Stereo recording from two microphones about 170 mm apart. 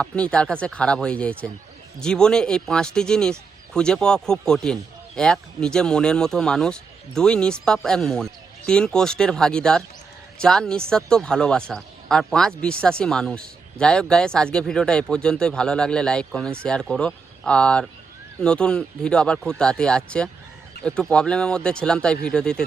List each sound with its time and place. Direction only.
0.0 s speech: 5° left (ahead or behind)